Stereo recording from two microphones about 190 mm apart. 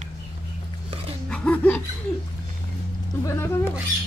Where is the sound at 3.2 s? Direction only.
15° left (ahead or behind).